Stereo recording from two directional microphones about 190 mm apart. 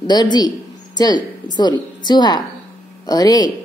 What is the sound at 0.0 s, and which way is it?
A woman's voice, 20° left (ahead or behind).